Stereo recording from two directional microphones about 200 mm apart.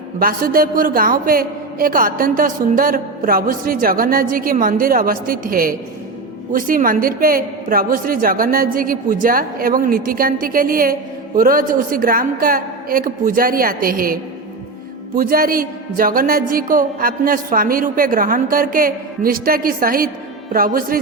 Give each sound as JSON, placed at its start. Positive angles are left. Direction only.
{"t": 0.2, "sound": "a woman's voice", "side_deg": -45}